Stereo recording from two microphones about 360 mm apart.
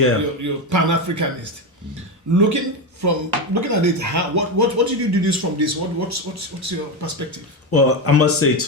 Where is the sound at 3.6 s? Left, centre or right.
Right.